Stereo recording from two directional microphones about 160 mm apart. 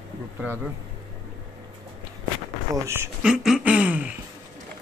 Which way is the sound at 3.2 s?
5° right (ahead or behind).